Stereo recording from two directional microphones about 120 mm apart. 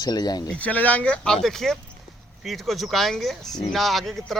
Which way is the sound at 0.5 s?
10° left (ahead or behind).